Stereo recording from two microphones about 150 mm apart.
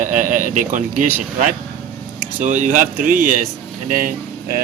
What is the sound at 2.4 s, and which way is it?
Speech, 55° right (ahead or behind).